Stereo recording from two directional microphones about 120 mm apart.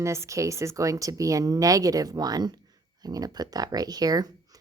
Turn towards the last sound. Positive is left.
turn(degrees=-35)  # may be behind; listen again after turning